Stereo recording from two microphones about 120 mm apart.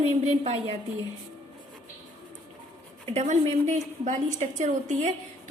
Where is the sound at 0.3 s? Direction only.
60° right (ahead or behind).